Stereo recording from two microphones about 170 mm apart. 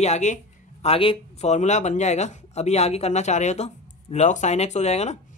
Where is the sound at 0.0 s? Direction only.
40° left (ahead or behind).